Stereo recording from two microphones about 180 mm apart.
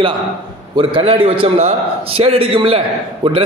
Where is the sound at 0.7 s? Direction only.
30° right (ahead or behind).